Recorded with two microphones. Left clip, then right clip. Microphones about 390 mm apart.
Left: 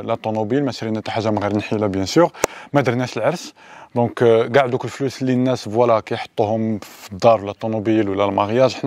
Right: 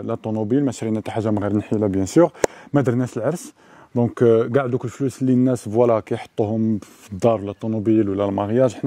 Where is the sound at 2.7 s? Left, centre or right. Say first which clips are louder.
Left 2 dB; left.